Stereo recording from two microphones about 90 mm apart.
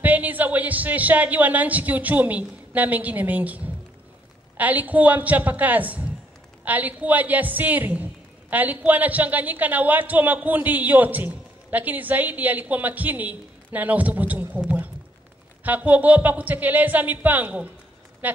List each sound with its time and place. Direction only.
0.0 s a woman's voice: 20° right (ahead or behind)
15.6 s a man's voice: 20° right (ahead or behind)
18.2 s a sound: 20° right (ahead or behind)